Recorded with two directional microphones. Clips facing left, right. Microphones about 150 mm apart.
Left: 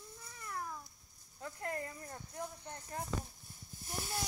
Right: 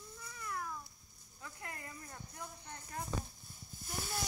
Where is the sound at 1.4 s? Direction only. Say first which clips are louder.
Left 8 dB; 45° left (ahead or behind).